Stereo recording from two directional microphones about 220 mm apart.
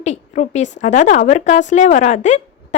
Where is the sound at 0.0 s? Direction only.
30° left (ahead or behind).